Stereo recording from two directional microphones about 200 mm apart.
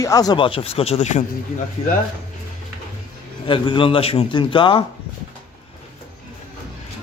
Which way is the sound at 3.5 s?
25° left (ahead or behind).